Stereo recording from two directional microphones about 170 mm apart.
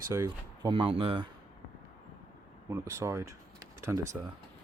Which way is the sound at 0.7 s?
30° right (ahead or behind).